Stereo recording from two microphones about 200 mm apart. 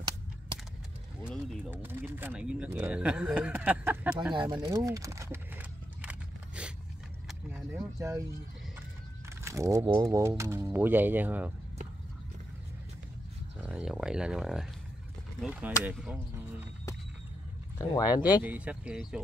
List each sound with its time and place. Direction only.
1.2 s speech: centre (ahead or behind)
1.7 s speech: 10° right (ahead or behind)
4.3 s horse: 20° right (ahead or behind)
7.2 s vehicle: 5° right (ahead or behind)
9.4 s speech: 15° right (ahead or behind)
13.6 s speech: 5° right (ahead or behind)
17.7 s speech: 20° left (ahead or behind)
18.4 s speech: 10° right (ahead or behind)